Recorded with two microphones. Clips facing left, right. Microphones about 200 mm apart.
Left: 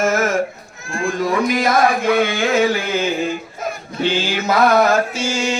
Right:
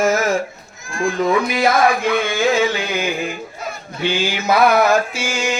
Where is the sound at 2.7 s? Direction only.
15° right (ahead or behind).